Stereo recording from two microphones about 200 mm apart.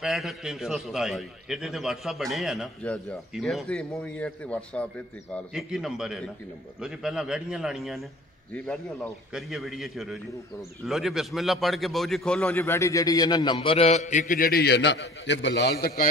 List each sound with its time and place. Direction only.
0.0 s a man's voice: centre (ahead or behind); by 16.1 s 50° left (ahead or behind)